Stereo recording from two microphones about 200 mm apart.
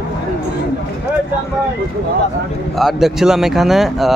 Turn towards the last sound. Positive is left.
turn(degrees=0)  # may be behind; listen again after turning